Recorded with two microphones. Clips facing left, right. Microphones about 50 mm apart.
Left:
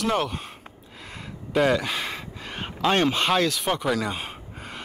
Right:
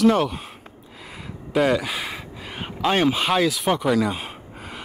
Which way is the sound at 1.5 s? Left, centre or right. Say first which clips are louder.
Right 1 dB; centre.